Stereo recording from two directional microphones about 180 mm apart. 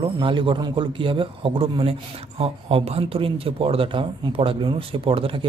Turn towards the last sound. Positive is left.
turn(degrees=-30)  # may be behind; listen again after turning